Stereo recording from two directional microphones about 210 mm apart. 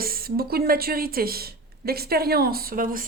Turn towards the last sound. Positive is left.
turn(degrees=-40)  # may be behind; listen again after turning